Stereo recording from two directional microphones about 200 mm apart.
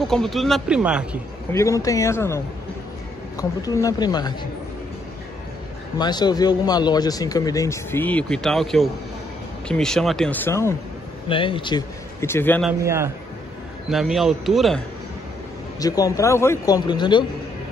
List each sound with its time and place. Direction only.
0.0 s speech: centre (ahead or behind)
1.5 s a man's voice: 15° left (ahead or behind)
5.9 s a man's voice: 20° left (ahead or behind)
11.2 s speech: 25° left (ahead or behind)
12.8 s a man's voice: 15° right (ahead or behind)
13.8 s speech: centre (ahead or behind)
15.8 s a man's voice: 20° left (ahead or behind)